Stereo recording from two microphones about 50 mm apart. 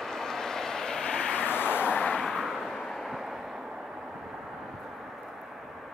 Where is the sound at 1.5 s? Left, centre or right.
Left.